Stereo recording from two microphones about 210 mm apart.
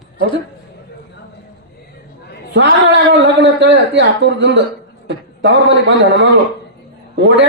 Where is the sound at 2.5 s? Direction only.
55° right (ahead or behind).